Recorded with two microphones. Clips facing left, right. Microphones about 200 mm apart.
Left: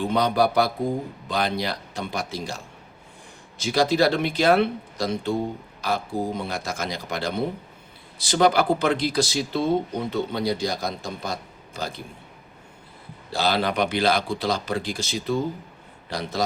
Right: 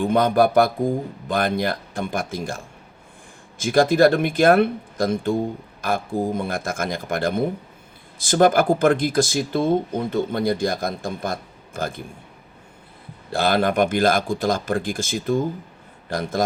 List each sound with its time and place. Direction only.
0.0 s speech: 50° right (ahead or behind)
3.6 s speech: 50° right (ahead or behind)
13.3 s speech: 50° right (ahead or behind)